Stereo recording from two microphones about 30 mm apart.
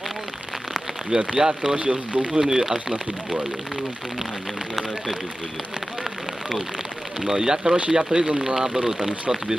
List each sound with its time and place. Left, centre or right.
1.1 s speech: right
1.9 s speech: right
2.4 s speech: centre
7.2 s speech: centre
8.4 s speech: centre